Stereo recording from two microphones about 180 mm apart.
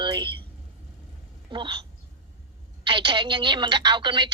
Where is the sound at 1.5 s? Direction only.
25° right (ahead or behind).